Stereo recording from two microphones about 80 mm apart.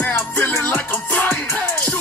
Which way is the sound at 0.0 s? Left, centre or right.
Left.